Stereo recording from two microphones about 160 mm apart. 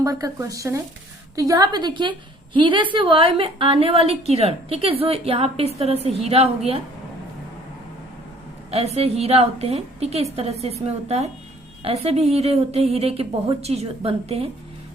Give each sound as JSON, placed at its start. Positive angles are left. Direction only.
{"t": 0.0, "sound": "a woman's voice", "side_deg": -20}
{"t": 8.7, "sound": "a woman's voice", "side_deg": -40}